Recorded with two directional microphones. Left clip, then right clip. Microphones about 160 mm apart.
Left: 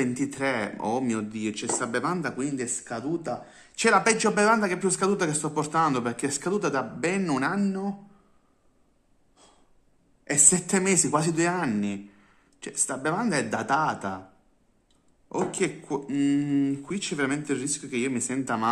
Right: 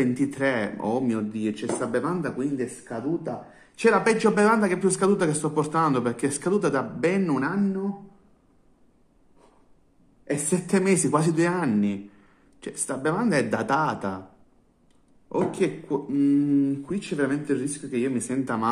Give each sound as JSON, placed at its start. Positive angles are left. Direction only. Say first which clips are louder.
{"t": 0.0, "sound": "speech", "louder": "right 3 dB", "side_deg": 15}
{"t": 3.8, "sound": "a woman's voice", "louder": "right 1 dB", "side_deg": 20}
{"t": 7.2, "sound": "speech", "louder": "even", "side_deg": 30}
{"t": 10.7, "sound": "a woman's voice", "louder": "right 2 dB", "side_deg": 15}
{"t": 15.2, "sound": "speech", "louder": "right 3 dB", "side_deg": 20}
{"t": 15.9, "sound": "a woman's voice", "louder": "right 3 dB", "side_deg": 35}